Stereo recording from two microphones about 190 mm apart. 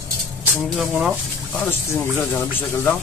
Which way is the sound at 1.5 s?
10° left (ahead or behind).